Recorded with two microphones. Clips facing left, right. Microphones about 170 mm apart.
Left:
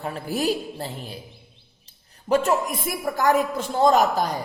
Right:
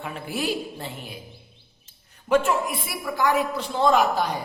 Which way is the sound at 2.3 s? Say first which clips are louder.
Even; 40° left (ahead or behind).